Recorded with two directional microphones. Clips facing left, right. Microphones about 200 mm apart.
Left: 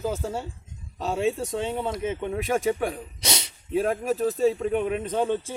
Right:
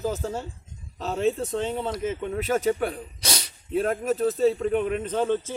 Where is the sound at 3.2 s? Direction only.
20° left (ahead or behind).